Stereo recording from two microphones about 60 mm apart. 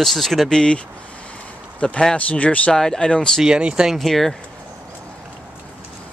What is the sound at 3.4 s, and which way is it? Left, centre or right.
Speech, centre.